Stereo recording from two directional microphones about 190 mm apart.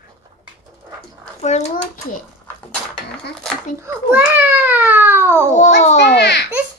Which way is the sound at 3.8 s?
10° right (ahead or behind).